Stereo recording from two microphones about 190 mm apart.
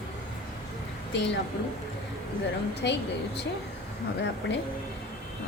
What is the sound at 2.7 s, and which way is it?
Speech, 65° left (ahead or behind).